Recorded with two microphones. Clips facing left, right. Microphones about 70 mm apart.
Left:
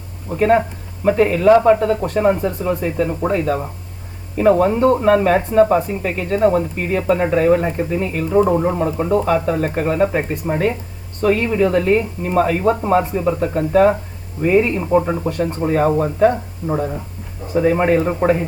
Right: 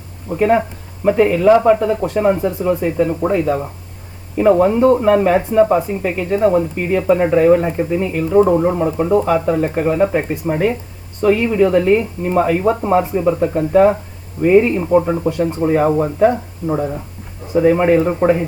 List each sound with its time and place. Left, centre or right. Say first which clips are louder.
0.3 s speech: even; centre
2.4 s speech: right 2 dB; centre
2.6 s speech: right 4 dB; centre
15.3 s speech: right 3 dB; centre
15.6 s speech: right 2 dB; centre
17.5 s speech: right 3 dB; centre
17.8 s speech: right 2 dB; centre